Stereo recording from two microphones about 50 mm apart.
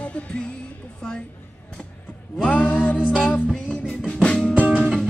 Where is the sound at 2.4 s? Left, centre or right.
Left.